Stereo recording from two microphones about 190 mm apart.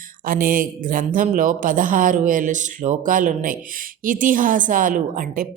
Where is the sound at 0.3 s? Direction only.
45° right (ahead or behind).